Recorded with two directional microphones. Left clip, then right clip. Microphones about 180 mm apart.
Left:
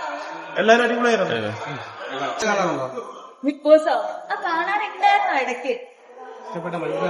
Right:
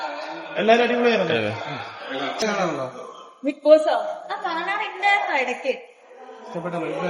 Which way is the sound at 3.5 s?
20° left (ahead or behind).